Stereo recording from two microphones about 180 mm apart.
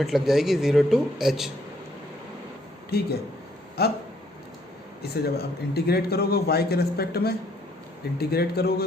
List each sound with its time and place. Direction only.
0.0 s speech: centre (ahead or behind)
2.9 s a man's voice: 60° left (ahead or behind)
5.0 s a man's voice: 60° left (ahead or behind)